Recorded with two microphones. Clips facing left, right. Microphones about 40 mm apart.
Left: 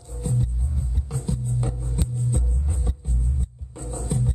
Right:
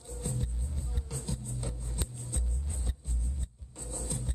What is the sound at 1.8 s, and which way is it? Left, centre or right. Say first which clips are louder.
Music: left 12 dB; left.